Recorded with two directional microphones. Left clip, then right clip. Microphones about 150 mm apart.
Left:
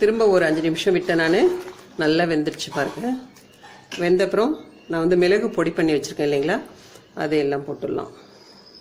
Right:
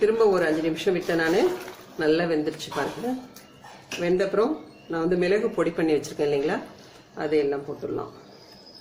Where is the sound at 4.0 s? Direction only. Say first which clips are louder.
Left 4 dB; 45° left (ahead or behind).